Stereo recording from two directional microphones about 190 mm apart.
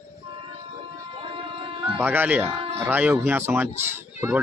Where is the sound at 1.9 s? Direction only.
10° right (ahead or behind).